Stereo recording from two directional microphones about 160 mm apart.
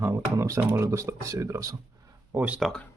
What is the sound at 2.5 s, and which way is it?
Speech, centre (ahead or behind).